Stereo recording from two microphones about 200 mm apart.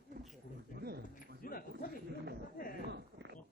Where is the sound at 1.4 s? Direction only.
45° left (ahead or behind).